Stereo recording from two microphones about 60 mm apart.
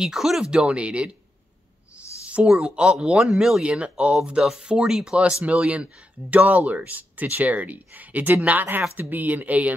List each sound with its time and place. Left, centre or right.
0.0 s speech: centre
2.2 s speech: right